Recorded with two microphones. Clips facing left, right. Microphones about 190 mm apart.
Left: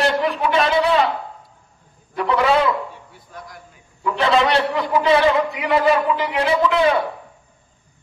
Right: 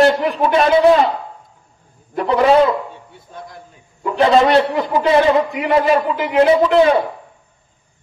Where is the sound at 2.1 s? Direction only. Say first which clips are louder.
Right 5 dB; 40° right (ahead or behind).